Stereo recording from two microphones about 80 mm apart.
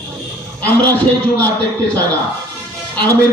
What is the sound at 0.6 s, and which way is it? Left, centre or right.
Speech, left.